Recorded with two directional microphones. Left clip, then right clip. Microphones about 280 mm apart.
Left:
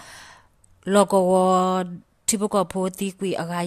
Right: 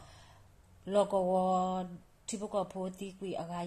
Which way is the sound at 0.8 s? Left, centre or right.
Left.